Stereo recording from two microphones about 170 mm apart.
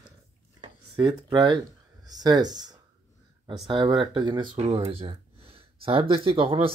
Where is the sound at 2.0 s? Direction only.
25° right (ahead or behind).